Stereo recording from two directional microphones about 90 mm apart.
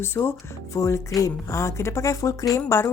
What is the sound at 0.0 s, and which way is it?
A woman's voice, 25° left (ahead or behind).